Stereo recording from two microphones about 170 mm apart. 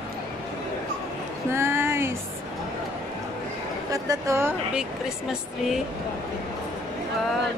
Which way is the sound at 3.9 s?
20° right (ahead or behind).